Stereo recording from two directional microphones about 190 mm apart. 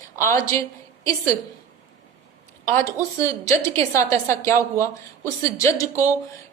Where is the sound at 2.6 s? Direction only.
15° left (ahead or behind).